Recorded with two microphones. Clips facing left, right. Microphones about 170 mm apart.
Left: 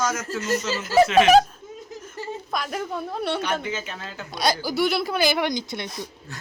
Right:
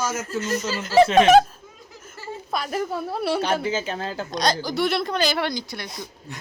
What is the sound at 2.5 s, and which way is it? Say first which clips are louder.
Speech: right 4 dB; centre (ahead or behind).